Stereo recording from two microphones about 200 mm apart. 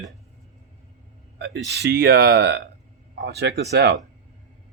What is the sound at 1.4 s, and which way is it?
Speech, 55° right (ahead or behind).